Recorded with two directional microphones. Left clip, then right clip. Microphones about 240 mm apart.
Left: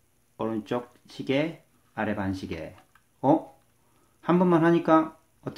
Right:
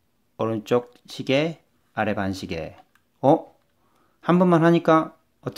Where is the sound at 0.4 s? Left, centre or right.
Right.